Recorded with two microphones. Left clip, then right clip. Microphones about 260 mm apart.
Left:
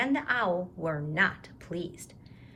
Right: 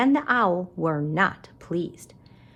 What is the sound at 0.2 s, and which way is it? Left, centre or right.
Speech, centre.